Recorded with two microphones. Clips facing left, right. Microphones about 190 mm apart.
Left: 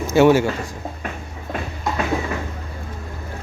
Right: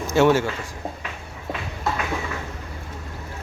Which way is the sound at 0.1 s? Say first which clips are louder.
Left 4 dB; 10° left (ahead or behind).